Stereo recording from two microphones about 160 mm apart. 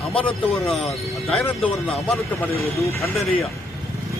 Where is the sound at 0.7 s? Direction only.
Centre (ahead or behind).